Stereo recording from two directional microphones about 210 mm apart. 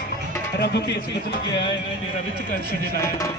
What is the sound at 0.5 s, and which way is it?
Speech, 55° left (ahead or behind).